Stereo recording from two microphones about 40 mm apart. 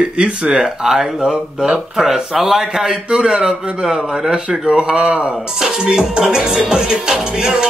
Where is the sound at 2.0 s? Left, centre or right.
Centre.